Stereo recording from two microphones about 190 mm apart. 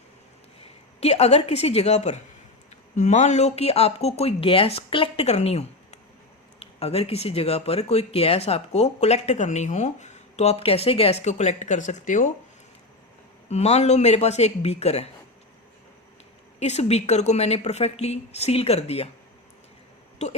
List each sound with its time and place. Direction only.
0.9 s speech: 35° left (ahead or behind)
13.5 s speech: 35° left (ahead or behind)
16.6 s speech: 35° left (ahead or behind)
20.2 s speech: 35° left (ahead or behind)